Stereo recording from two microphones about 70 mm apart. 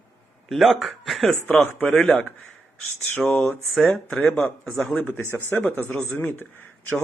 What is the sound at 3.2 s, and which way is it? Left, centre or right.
Speech, centre.